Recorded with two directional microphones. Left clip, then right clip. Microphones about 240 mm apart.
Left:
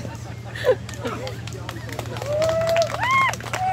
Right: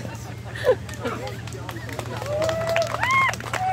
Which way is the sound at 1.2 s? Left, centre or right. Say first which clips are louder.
Left 1 dB; left.